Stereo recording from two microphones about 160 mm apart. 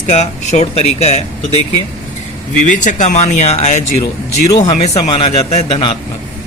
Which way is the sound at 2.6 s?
50° left (ahead or behind).